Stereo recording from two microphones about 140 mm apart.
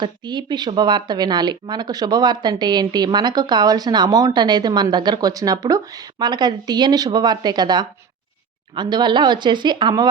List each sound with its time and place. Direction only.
0.0 s speech: 30° right (ahead or behind)